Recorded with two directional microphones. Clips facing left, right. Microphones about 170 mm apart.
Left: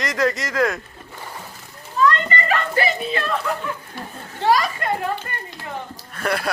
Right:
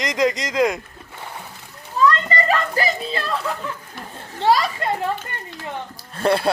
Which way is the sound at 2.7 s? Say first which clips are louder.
Left 1 dB; 30° right (ahead or behind).